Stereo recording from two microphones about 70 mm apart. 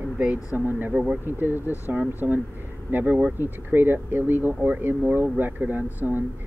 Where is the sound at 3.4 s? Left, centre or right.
Right.